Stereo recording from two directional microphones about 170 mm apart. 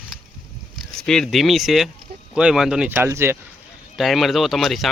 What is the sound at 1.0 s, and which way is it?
Speech, 5° left (ahead or behind).